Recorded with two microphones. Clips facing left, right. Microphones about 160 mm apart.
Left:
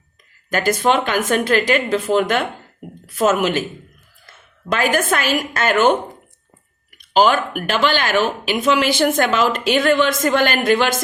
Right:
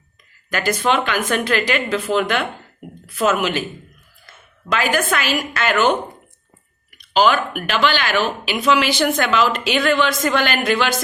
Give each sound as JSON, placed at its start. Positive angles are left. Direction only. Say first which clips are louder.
{"t": 0.5, "sound": "speech", "louder": "left 2 dB", "side_deg": 45}
{"t": 4.7, "sound": "speech", "louder": "left 1 dB", "side_deg": 50}
{"t": 6.9, "sound": "speech", "louder": "left 1 dB", "side_deg": 50}